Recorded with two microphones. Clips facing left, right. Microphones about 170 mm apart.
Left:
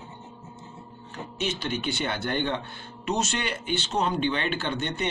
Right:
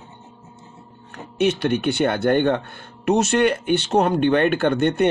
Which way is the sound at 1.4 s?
60° right (ahead or behind).